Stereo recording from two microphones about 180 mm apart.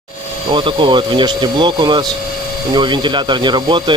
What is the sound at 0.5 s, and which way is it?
Speech, 25° right (ahead or behind).